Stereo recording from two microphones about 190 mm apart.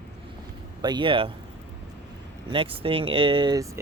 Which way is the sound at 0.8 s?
25° right (ahead or behind).